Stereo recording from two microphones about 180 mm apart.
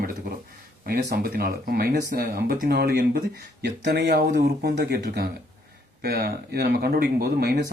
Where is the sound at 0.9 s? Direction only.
55° right (ahead or behind).